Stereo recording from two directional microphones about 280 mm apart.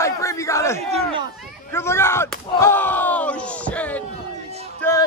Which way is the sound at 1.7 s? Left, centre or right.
Centre.